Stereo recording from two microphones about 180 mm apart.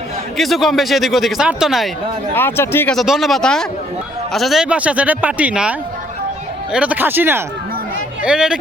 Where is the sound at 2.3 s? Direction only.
10° left (ahead or behind).